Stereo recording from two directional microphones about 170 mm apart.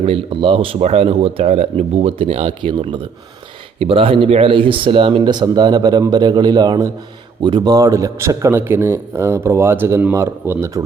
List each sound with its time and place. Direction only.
0.0 s a man's voice: 35° right (ahead or behind); by 10.8 s 15° right (ahead or behind)